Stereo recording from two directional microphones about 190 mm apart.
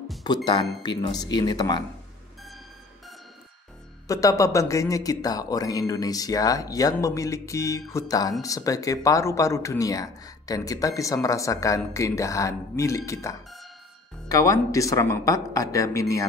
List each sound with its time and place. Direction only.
0.8 s speech: 20° left (ahead or behind)
4.1 s speech: 15° left (ahead or behind)